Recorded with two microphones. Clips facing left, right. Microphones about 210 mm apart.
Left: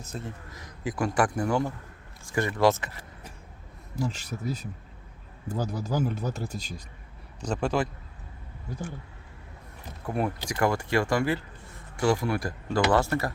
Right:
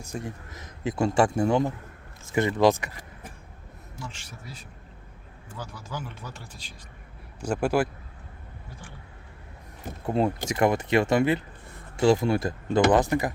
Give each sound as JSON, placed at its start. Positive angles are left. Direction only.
{"t": 0.0, "sound": "speech", "side_deg": -15}
{"t": 3.9, "sound": "speech", "side_deg": 35}
{"t": 7.4, "sound": "speech", "side_deg": -10}
{"t": 10.1, "sound": "speech", "side_deg": -25}